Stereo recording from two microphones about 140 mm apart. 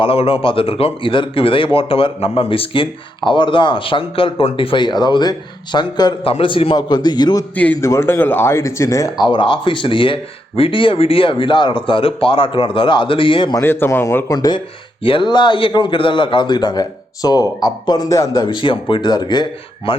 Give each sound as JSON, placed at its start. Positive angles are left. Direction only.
{"t": 0.0, "sound": "speech", "side_deg": 40}
{"t": 7.5, "sound": "a man's voice", "side_deg": 10}
{"t": 13.6, "sound": "a man's voice", "side_deg": 15}
{"t": 14.3, "sound": "a man's voice", "side_deg": 30}
{"t": 18.5, "sound": "speech", "side_deg": 35}